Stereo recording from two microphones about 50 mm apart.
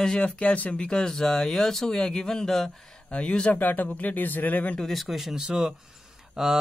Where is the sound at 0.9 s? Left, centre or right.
Centre.